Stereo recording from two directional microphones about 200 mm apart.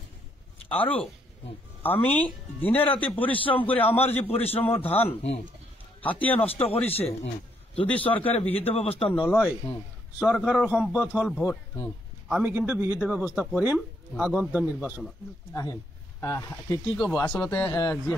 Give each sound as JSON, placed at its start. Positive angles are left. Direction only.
{"t": 1.8, "sound": "speech", "side_deg": 10}
{"t": 3.3, "sound": "a man's voice", "side_deg": 25}
{"t": 3.7, "sound": "speech", "side_deg": 10}
{"t": 4.0, "sound": "a man's voice", "side_deg": 30}
{"t": 7.8, "sound": "speech", "side_deg": 5}
{"t": 8.1, "sound": "a man's voice", "side_deg": 30}
{"t": 9.1, "sound": "a man's voice", "side_deg": -5}
{"t": 11.4, "sound": "speech", "side_deg": 10}
{"t": 12.3, "sound": "speech", "side_deg": -5}
{"t": 16.2, "sound": "speech", "side_deg": 15}
{"t": 16.8, "sound": "a man's voice", "side_deg": 0}